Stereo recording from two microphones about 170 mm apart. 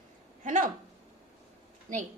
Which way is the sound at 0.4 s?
50° right (ahead or behind).